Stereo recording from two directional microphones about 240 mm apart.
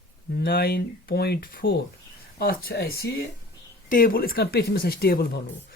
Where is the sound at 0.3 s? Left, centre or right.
Left.